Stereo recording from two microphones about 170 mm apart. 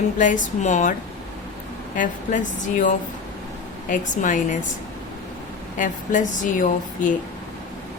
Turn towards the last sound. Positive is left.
turn(degrees=50)  # may be behind; listen again after turning